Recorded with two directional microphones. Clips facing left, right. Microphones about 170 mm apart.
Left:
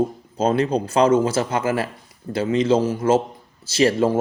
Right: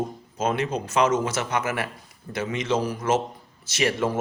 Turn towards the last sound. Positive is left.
turn(degrees=30)  # may be behind; listen again after turning